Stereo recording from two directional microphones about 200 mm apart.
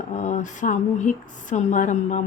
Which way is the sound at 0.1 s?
35° left (ahead or behind).